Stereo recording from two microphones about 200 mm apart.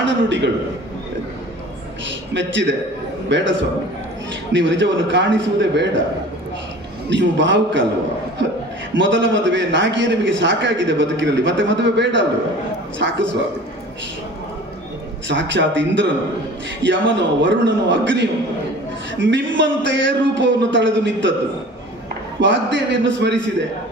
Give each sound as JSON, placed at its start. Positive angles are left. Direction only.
{"t": 0.0, "sound": "a man's voice", "side_deg": -65}
{"t": 2.3, "sound": "a man's voice", "side_deg": -65}
{"t": 4.5, "sound": "speech", "side_deg": -65}
{"t": 7.1, "sound": "a man's voice", "side_deg": -65}
{"t": 9.0, "sound": "a man's voice", "side_deg": -65}
{"t": 15.3, "sound": "a man's voice", "side_deg": -65}
{"t": 22.4, "sound": "a man's voice", "side_deg": -65}